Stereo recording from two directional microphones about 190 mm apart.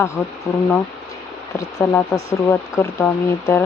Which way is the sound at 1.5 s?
15° left (ahead or behind).